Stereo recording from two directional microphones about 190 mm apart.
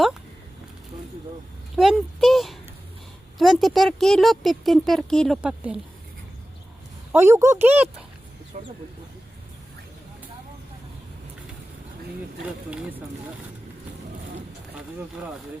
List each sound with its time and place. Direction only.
1.7 s speech: centre (ahead or behind)
7.1 s speech: 15° right (ahead or behind)
8.5 s speech: 40° right (ahead or behind)